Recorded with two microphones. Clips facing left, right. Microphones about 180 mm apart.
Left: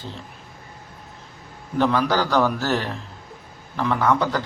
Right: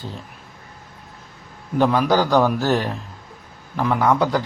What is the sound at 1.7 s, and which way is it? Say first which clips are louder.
A man's voice: right 3 dB; 15° right (ahead or behind).